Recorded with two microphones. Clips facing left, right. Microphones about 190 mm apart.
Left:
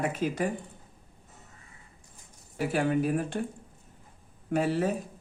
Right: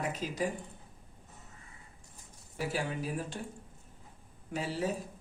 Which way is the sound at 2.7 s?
60° left (ahead or behind).